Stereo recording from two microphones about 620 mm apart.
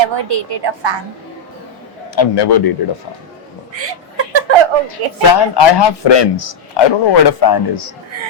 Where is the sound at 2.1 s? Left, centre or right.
Left.